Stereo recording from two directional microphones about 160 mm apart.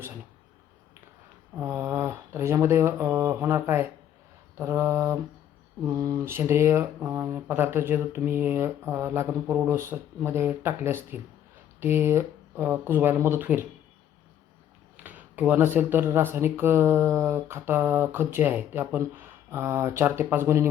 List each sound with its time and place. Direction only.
1.5 s speech: 15° right (ahead or behind)
14.9 s speech: 10° right (ahead or behind)